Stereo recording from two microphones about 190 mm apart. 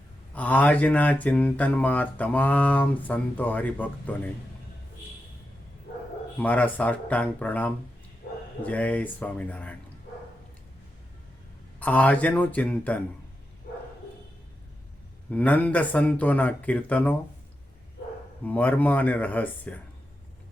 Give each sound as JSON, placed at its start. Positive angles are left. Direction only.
{"t": 0.3, "sound": "speech", "side_deg": 10}
{"t": 6.4, "sound": "speech", "side_deg": 10}
{"t": 8.2, "sound": "bow-wow", "side_deg": 60}
{"t": 8.6, "sound": "speech", "side_deg": 10}
{"t": 11.8, "sound": "speech", "side_deg": 10}
{"t": 15.3, "sound": "speech", "side_deg": 10}
{"t": 18.4, "sound": "speech", "side_deg": 10}